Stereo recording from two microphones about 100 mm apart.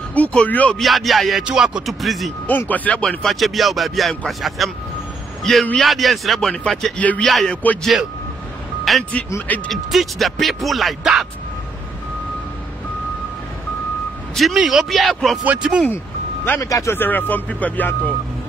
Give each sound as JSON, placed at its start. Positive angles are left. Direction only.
{"t": 0.1, "sound": "speech", "side_deg": 15}
{"t": 0.7, "sound": "speech", "side_deg": 0}
{"t": 2.7, "sound": "a man's voice", "side_deg": 15}
{"t": 7.2, "sound": "speech", "side_deg": 0}
{"t": 14.3, "sound": "speech", "side_deg": 0}
{"t": 15.4, "sound": "speech", "side_deg": -15}
{"t": 16.6, "sound": "speech", "side_deg": 35}
{"t": 16.9, "sound": "speech", "side_deg": 20}